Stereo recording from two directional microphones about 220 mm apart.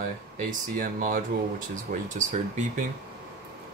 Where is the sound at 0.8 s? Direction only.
40° right (ahead or behind).